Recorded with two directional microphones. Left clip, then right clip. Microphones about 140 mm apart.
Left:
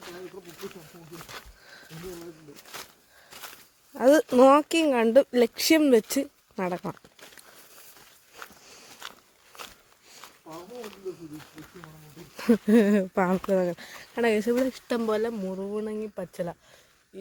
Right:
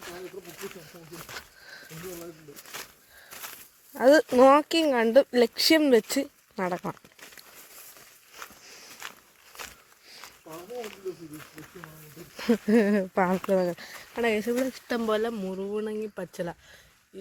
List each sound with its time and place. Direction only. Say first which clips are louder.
4.3 s speech: even; 20° left (ahead or behind)
12.4 s speech: left 2 dB; 20° left (ahead or behind)
14.8 s speech: even; centre (ahead or behind)
15.4 s speech: even; 20° right (ahead or behind)